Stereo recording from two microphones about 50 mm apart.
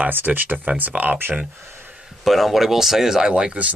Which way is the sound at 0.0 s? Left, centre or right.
Right.